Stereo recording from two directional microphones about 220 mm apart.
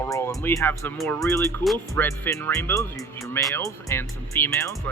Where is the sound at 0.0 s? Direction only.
15° left (ahead or behind).